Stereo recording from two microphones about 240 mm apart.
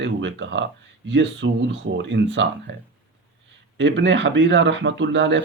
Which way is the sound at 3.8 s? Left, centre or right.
Right.